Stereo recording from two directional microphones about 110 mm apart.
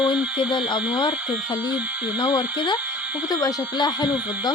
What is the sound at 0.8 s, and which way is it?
Speech, 5° right (ahead or behind).